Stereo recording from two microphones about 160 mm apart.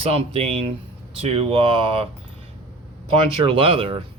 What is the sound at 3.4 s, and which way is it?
Speech, 35° right (ahead or behind).